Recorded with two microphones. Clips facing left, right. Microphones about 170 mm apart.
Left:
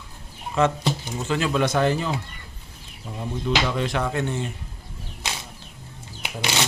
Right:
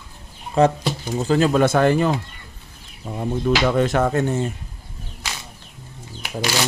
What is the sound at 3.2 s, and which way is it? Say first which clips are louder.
Speech: right 5 dB; 50° right (ahead or behind).